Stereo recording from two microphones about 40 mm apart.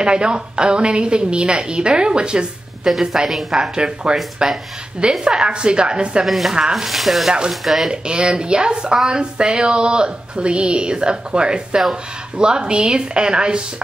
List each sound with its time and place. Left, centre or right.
0.0 s speech: right
2.8 s a woman's voice: centre
3.5 s speech: right
6.2 s speech: centre
7.9 s speech: right